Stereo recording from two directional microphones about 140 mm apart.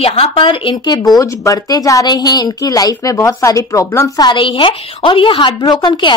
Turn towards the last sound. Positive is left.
turn(degrees=35)  # may be behind; listen again after turning